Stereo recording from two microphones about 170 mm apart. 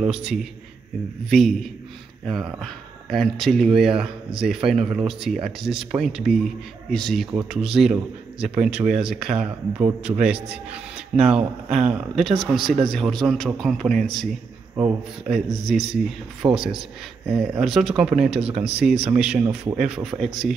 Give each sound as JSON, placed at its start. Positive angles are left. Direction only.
{"t": 0.0, "sound": "speech", "side_deg": -5}
{"t": 15.6, "sound": "speech", "side_deg": 0}
{"t": 16.4, "sound": "speech", "side_deg": -25}
{"t": 17.3, "sound": "speech", "side_deg": 0}